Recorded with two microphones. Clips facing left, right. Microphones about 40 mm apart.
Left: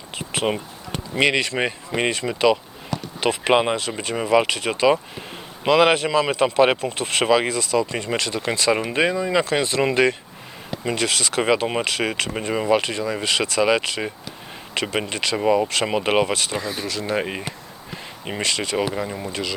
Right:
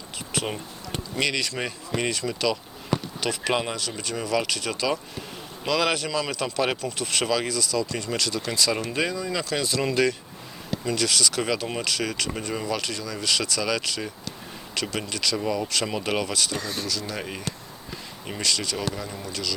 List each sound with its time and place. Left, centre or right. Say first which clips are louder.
0.2 s a sound: left 6 dB; left
1.1 s speech: left 7 dB; left
16.6 s speech: left 4 dB; centre
16.8 s speech: left 7 dB; left